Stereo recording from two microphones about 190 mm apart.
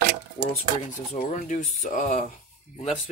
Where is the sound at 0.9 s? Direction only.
45° left (ahead or behind).